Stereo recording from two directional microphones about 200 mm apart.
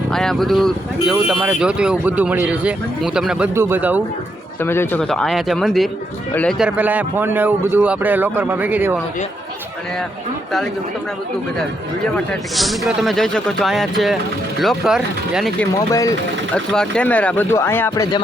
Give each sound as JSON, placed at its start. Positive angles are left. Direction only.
{"t": 0.1, "sound": "speech", "side_deg": 0}
{"t": 4.6, "sound": "a man's voice", "side_deg": 10}
{"t": 12.1, "sound": "speech", "side_deg": 0}
{"t": 15.9, "sound": "speech", "side_deg": 15}
{"t": 16.7, "sound": "speech", "side_deg": 5}